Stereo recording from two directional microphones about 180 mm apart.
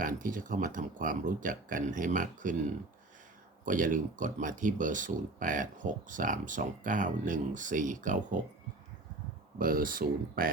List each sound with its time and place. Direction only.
0.0 s speech: 45° right (ahead or behind)
3.6 s speech: 45° right (ahead or behind)
9.6 s speech: 50° right (ahead or behind)